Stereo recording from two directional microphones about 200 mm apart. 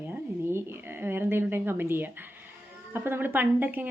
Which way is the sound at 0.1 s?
10° right (ahead or behind).